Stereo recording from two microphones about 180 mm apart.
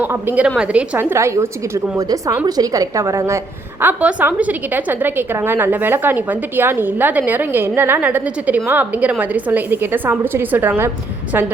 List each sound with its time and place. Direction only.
0.0 s a woman's voice: 10° right (ahead or behind)